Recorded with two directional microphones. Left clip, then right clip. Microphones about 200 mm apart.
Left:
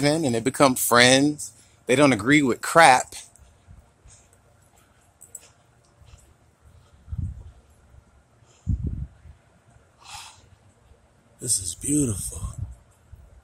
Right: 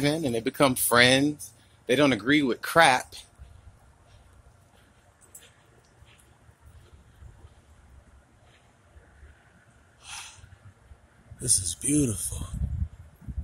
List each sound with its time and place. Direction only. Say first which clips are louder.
0.0 s speech: left 4 dB; 35° left (ahead or behind)
9.9 s snort: left 1 dB; 10° left (ahead or behind)
11.3 s speech: left 1 dB; 10° left (ahead or behind)